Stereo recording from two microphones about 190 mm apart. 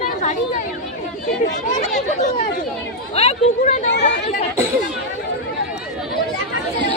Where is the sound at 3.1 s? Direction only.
35° left (ahead or behind).